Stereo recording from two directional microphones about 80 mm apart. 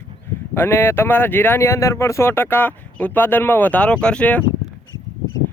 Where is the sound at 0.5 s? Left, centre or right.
Left.